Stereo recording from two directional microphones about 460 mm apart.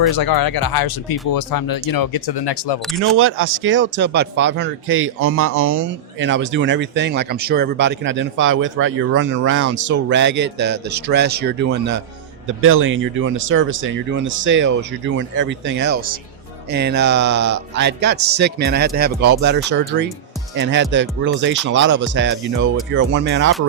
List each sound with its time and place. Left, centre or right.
0.1 s speech: left
3.2 s speech: right
20.6 s speech: right